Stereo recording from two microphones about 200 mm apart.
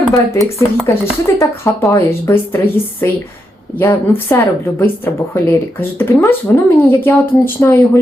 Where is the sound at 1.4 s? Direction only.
15° left (ahead or behind).